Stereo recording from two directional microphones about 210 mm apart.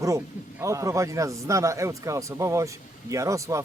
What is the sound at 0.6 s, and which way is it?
A man's voice, 15° right (ahead or behind).